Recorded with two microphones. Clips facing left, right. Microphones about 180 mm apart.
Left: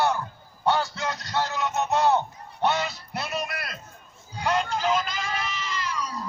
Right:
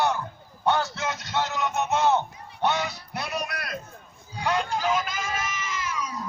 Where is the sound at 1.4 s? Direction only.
20° right (ahead or behind).